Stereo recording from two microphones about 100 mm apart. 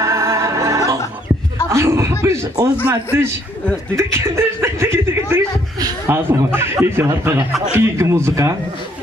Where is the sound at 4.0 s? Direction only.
30° right (ahead or behind).